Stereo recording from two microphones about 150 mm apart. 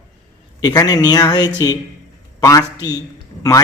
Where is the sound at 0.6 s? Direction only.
25° left (ahead or behind).